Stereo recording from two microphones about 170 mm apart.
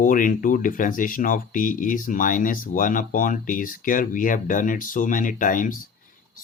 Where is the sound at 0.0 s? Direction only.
50° left (ahead or behind).